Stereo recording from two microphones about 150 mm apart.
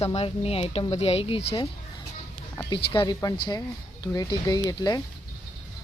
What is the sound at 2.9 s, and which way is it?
Speech, 30° left (ahead or behind).